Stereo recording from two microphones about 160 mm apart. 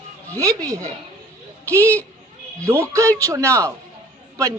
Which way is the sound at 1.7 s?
10° left (ahead or behind).